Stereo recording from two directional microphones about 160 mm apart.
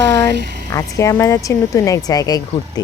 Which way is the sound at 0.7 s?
20° left (ahead or behind).